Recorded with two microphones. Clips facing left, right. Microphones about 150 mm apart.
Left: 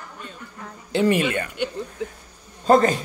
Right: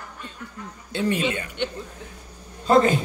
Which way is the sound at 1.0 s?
75° left (ahead or behind).